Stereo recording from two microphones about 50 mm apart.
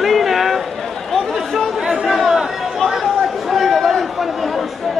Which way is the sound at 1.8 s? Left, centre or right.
Centre.